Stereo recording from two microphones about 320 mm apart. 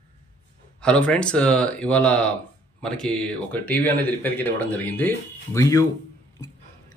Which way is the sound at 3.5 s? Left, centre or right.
Centre.